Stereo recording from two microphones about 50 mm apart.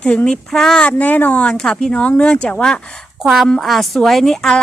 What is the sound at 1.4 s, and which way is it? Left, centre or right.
A woman's voice, centre.